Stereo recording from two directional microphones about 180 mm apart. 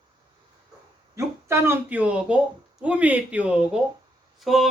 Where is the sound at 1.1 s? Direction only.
15° right (ahead or behind).